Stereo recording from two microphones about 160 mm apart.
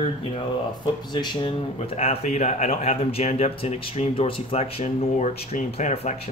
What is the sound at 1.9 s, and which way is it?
Speech, 40° left (ahead or behind).